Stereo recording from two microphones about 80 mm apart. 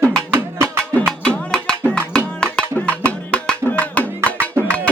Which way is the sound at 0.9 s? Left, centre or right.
Centre.